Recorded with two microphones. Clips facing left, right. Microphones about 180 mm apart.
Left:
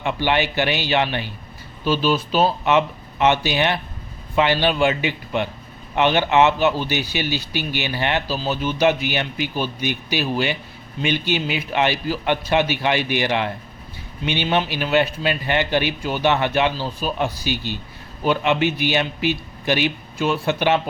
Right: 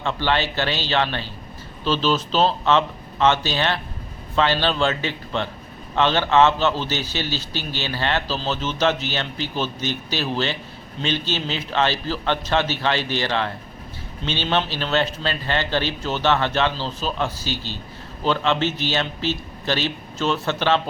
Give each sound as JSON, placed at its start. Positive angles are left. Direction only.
{"t": 0.0, "sound": "speech", "side_deg": 15}